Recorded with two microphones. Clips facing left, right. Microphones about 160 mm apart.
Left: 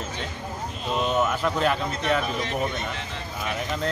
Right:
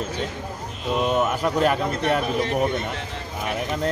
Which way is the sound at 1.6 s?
55° right (ahead or behind).